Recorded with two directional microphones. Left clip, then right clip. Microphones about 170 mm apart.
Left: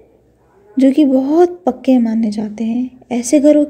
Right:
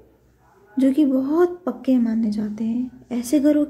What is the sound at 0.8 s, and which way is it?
A woman's voice, 20° left (ahead or behind).